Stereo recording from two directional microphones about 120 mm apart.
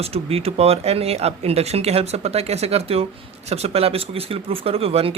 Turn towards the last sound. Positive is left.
turn(degrees=-55)  # may be behind; listen again after turning